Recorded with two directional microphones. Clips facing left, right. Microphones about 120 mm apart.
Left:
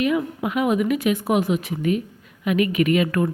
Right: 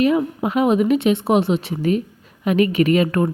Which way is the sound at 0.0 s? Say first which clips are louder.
Right 4 dB; 30° right (ahead or behind).